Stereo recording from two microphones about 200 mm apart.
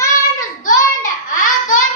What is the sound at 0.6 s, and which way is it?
Child singing, 40° left (ahead or behind).